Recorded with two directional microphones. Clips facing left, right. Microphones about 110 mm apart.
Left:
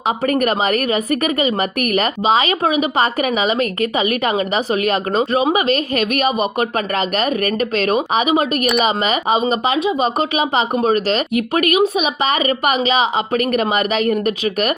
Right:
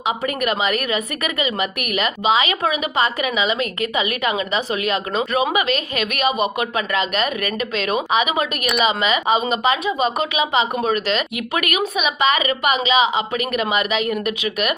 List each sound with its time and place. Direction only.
0.2 s speech: 45° left (ahead or behind)